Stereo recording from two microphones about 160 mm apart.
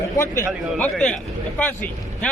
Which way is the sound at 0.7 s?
10° left (ahead or behind).